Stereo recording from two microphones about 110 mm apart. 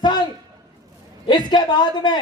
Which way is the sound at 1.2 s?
40° left (ahead or behind).